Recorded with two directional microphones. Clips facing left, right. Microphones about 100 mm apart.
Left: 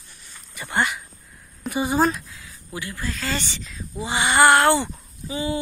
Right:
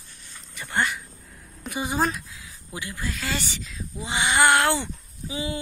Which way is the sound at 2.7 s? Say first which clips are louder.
Left 2 dB; 15° right (ahead or behind).